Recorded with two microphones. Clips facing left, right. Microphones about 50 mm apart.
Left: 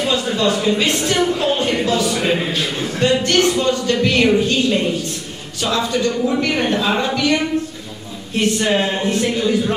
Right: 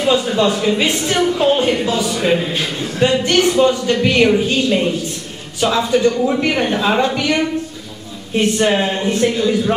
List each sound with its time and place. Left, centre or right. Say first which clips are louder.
0.0 s speech: right 3 dB; centre
2.1 s speech: right 2 dB; centre
9.0 s speech: right 2 dB; centre